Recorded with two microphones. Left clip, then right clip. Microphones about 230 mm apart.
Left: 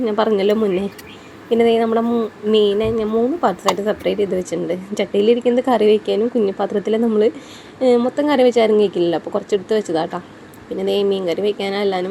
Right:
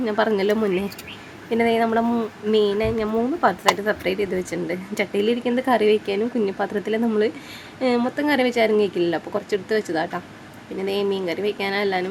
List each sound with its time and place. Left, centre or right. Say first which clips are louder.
0.0 s speech: left 4 dB; centre